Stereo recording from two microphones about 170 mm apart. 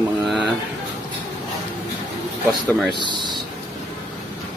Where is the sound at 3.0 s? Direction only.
25° right (ahead or behind).